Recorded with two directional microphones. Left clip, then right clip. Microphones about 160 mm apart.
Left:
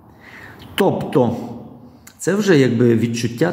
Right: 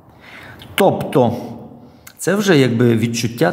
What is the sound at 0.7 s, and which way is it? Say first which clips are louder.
A man's voice: right 3 dB; 25° right (ahead or behind).